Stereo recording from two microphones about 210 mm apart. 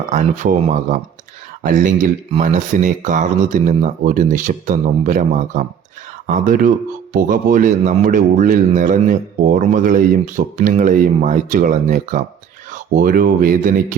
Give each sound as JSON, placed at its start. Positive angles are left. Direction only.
{"t": 0.1, "sound": "speech", "side_deg": -35}